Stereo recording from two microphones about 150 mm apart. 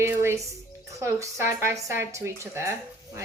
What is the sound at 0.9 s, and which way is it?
Speech, 20° right (ahead or behind).